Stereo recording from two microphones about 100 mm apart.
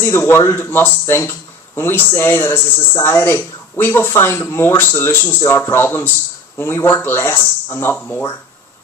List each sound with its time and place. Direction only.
0.0 s speech: 25° left (ahead or behind)